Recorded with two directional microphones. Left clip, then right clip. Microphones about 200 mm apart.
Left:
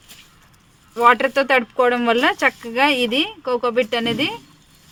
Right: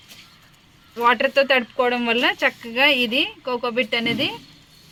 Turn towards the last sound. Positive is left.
turn(degrees=55)  # may be behind; listen again after turning